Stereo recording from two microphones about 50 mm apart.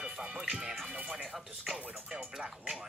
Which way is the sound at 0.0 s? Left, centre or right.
Centre.